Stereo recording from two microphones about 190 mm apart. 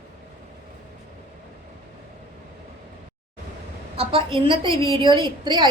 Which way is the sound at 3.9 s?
30° right (ahead or behind).